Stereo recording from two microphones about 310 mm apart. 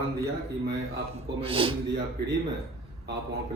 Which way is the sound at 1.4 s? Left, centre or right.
Centre.